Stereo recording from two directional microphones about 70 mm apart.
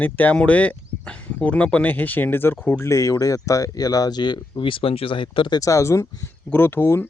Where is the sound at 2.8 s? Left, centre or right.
Left.